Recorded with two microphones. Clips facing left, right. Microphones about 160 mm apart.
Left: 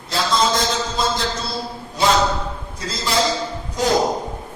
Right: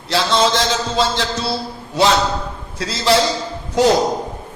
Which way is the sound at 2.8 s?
80° right.